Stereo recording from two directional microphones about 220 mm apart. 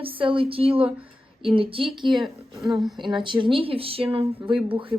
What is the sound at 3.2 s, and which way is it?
Speech, 20° right (ahead or behind).